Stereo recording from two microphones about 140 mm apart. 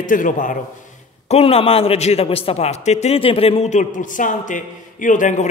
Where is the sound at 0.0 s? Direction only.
70° left (ahead or behind).